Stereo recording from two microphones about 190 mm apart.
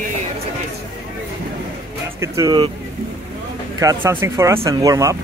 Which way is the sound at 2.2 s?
15° right (ahead or behind).